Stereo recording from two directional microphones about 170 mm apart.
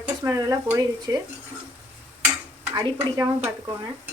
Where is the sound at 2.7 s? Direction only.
20° right (ahead or behind).